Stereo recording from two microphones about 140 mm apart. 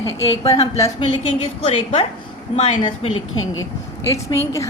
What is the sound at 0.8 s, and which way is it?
A woman's voice, 35° left (ahead or behind).